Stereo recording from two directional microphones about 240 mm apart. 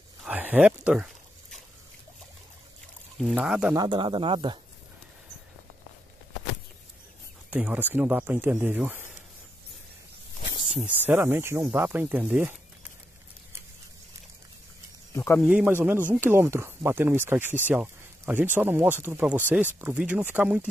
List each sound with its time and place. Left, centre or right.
0.2 s a sound: centre
3.2 s speech: centre
3.7 s speech: centre
7.5 s speech: centre
10.7 s speech: centre
15.1 s speech: centre
15.4 s speech: centre